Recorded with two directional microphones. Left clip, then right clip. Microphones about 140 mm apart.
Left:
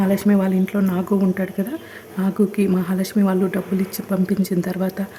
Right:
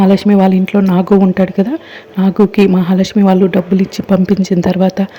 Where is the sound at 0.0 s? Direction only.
30° right (ahead or behind).